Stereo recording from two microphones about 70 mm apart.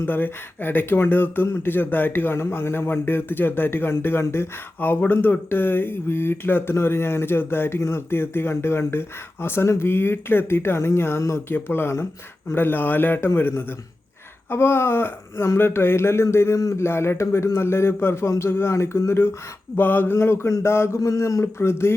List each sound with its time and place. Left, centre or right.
0.0 s a man's voice: left
14.5 s speech: left
16.6 s speech: left
16.8 s speech: left
21.4 s speech: left